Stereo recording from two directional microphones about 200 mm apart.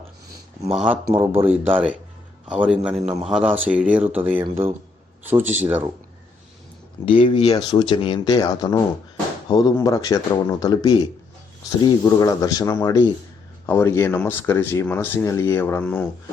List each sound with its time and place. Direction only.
0.7 s a man's voice: 5° right (ahead or behind)
7.0 s speech: 25° left (ahead or behind)
12.0 s speech: 20° left (ahead or behind)